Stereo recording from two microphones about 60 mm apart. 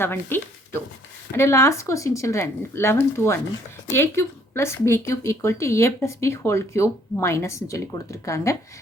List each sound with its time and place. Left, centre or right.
0.0 s speech: left
1.4 s speech: left